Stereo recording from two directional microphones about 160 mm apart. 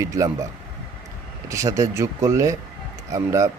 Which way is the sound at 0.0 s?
20° right (ahead or behind).